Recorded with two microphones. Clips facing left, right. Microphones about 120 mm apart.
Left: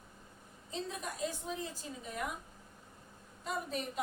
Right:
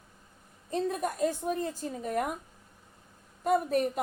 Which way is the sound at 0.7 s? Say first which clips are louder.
Right 10 dB; 55° right (ahead or behind).